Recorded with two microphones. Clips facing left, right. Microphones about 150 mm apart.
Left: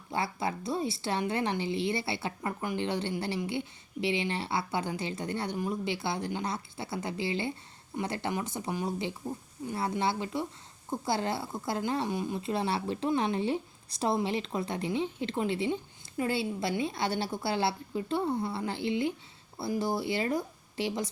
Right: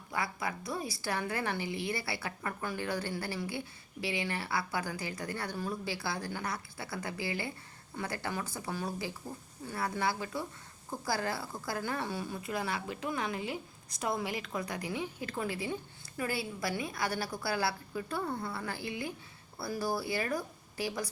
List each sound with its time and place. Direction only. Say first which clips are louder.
0.1 s a woman's voice: left 4 dB; 25° left (ahead or behind)